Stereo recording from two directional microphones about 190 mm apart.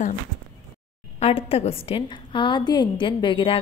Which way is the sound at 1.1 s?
30° left (ahead or behind).